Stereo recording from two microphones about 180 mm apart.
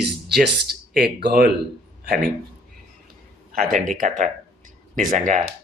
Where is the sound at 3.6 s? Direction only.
50° right (ahead or behind).